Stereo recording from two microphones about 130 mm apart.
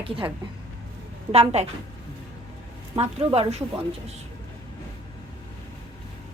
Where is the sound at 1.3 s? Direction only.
55° right (ahead or behind).